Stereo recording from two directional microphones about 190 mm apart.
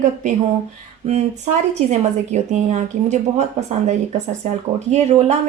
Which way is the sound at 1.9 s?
35° right (ahead or behind).